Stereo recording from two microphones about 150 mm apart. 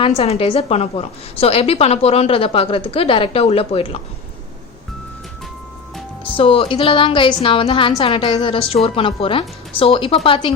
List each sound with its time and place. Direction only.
0.2 s a woman's voice: 40° left (ahead or behind)
6.2 s a woman's voice: 35° left (ahead or behind)